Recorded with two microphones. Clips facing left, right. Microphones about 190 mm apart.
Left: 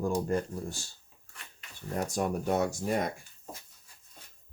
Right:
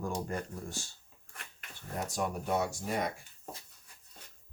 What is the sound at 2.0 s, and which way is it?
Speech, 45° left (ahead or behind).